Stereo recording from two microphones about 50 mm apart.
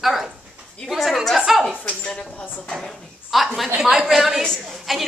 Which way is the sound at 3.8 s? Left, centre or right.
Centre.